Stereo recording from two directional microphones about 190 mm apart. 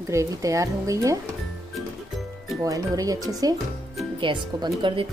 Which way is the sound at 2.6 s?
15° right (ahead or behind).